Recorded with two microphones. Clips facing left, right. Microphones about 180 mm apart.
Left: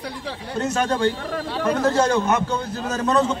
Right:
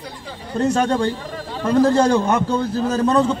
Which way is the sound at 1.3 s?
75° left (ahead or behind).